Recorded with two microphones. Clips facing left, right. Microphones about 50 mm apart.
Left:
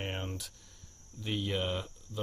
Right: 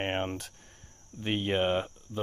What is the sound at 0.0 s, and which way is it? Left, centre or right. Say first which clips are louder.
Speech: right 7 dB; right.